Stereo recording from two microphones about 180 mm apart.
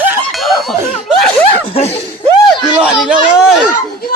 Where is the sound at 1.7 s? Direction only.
35° left (ahead or behind).